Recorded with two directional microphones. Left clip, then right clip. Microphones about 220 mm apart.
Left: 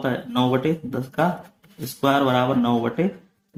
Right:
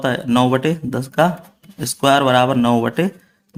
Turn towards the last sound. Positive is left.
turn(degrees=-35)  # may be behind; listen again after turning